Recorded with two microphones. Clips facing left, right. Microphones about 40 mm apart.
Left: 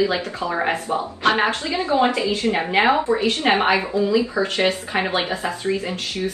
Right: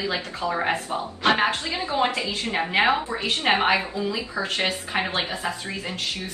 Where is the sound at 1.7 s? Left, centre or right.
Left.